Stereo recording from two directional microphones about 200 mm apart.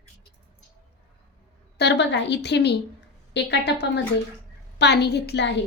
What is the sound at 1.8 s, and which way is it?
A woman's voice, 60° left (ahead or behind).